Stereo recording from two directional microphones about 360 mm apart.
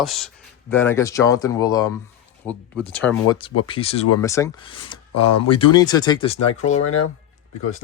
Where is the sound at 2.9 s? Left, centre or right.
Centre.